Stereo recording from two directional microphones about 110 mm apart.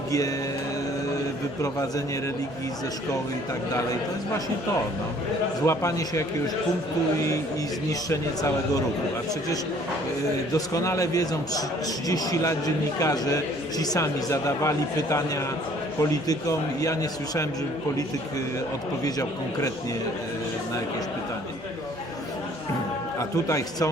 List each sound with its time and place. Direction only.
5.6 s speech: 30° left (ahead or behind)
8.1 s speech: 30° left (ahead or behind)
10.8 s a man's voice: 30° left (ahead or behind)
23.5 s a man's voice: 30° left (ahead or behind)